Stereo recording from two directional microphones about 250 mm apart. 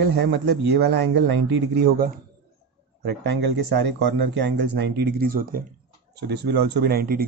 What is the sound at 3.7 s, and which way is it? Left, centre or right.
Speech, right.